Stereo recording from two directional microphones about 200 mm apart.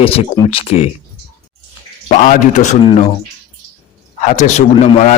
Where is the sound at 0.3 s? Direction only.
25° left (ahead or behind).